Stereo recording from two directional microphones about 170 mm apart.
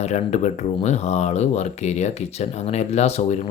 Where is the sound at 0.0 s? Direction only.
40° left (ahead or behind).